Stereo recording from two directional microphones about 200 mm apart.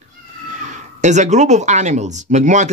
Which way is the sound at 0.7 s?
35° right (ahead or behind).